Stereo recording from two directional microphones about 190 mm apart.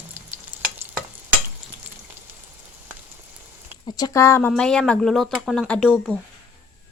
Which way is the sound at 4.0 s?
15° left (ahead or behind).